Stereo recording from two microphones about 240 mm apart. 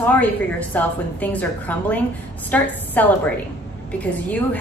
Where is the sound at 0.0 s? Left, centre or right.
Centre.